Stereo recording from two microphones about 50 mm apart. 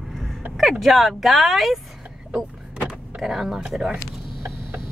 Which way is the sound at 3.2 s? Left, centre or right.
Centre.